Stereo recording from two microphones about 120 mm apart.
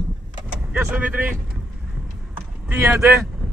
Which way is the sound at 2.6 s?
10° right (ahead or behind).